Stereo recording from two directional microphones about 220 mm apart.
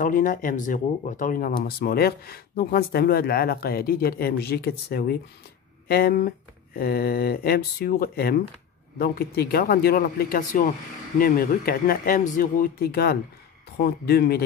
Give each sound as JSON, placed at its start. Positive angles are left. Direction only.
{"t": 0.0, "sound": "speech", "side_deg": 35}